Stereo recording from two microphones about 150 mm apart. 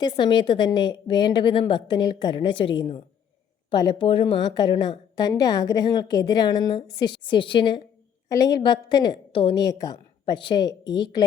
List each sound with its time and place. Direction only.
0.0 s a woman's voice: 30° left (ahead or behind)
9.6 s a woman's voice: 25° left (ahead or behind)